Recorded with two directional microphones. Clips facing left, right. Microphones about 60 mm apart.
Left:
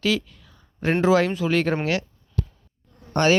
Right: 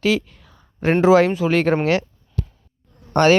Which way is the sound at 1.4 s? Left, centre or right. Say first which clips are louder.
Right 4 dB; right.